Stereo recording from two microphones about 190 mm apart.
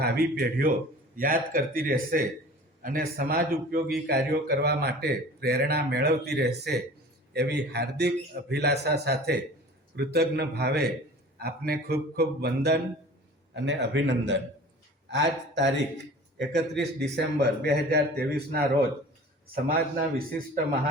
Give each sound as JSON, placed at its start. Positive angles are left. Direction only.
{"t": 0.0, "sound": "a man's voice", "side_deg": -55}
{"t": 13.6, "sound": "a man's voice", "side_deg": -70}